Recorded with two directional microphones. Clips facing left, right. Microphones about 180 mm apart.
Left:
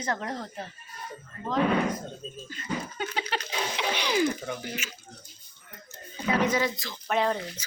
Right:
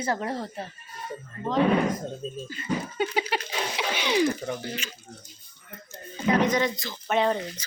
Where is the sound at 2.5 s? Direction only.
5° right (ahead or behind).